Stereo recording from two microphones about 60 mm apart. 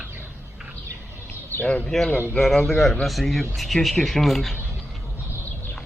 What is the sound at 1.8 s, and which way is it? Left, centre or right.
A woman's voice, centre.